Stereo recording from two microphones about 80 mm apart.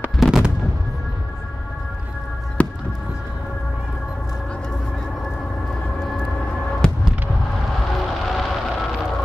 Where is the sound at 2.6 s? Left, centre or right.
Centre.